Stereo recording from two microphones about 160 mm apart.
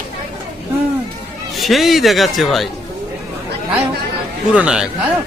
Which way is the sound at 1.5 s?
Centre (ahead or behind).